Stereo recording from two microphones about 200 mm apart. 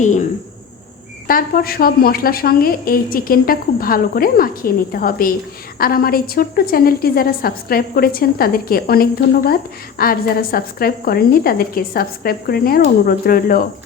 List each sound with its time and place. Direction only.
1.3 s a woman's voice: 45° left (ahead or behind)